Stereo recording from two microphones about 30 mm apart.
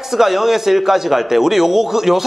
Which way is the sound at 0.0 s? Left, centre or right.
Centre.